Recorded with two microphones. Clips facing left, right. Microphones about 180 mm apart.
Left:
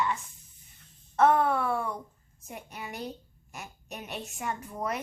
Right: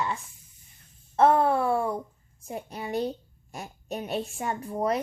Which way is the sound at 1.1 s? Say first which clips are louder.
Right 2 dB; 30° right (ahead or behind).